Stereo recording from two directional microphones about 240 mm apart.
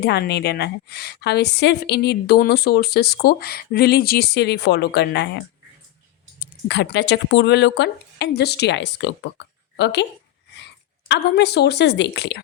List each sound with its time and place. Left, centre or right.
0.0 s a woman's voice: left
11.1 s a woman's voice: left